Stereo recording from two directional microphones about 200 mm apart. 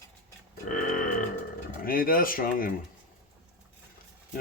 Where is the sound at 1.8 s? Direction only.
45° left (ahead or behind).